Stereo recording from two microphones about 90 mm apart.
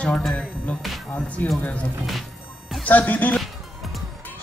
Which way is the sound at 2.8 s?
15° left (ahead or behind).